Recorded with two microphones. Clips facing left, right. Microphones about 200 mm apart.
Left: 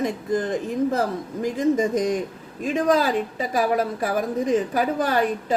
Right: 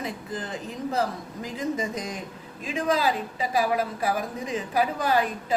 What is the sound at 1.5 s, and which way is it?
A woman's voice, 45° left (ahead or behind).